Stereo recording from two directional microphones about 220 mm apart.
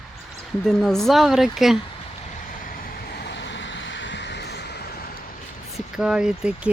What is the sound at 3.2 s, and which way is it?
Vehicle, 50° left (ahead or behind).